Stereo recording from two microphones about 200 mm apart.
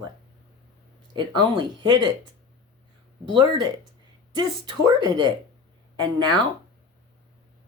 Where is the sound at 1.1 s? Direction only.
25° right (ahead or behind).